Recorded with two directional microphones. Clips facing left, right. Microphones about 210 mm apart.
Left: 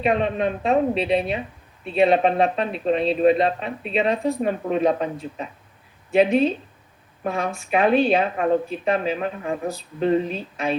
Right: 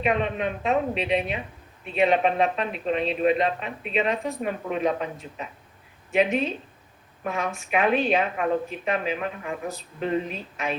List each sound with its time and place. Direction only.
0.0 s speech: 35° left (ahead or behind)